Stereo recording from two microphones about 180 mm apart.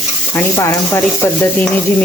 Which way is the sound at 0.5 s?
15° left (ahead or behind).